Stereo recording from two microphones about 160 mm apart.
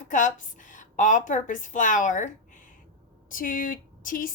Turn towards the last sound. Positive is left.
turn(degrees=60)  # may be behind; listen again after turning